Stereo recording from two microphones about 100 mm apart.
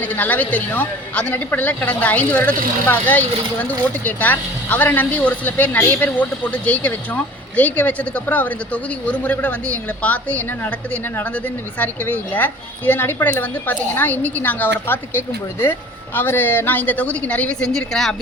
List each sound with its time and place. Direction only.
0.0 s a man's voice: 15° left (ahead or behind)